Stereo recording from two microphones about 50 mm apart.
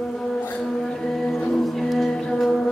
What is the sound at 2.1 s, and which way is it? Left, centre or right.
Music, centre.